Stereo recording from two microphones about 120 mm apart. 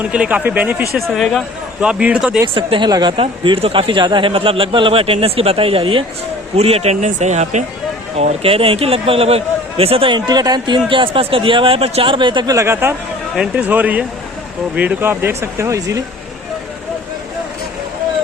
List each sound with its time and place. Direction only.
0.0 s speech: 10° right (ahead or behind)
0.9 s speech: centre (ahead or behind)
2.6 s speech: 40° right (ahead or behind)
10.2 s speech: 35° right (ahead or behind)
12.5 s speech: 20° right (ahead or behind)
13.3 s speech: 5° right (ahead or behind); by 16.0 s 25° right (ahead or behind)